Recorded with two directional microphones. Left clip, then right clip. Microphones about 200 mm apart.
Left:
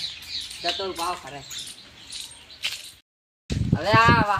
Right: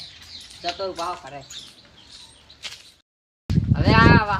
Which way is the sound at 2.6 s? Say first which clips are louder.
Left 6 dB; 15° left (ahead or behind).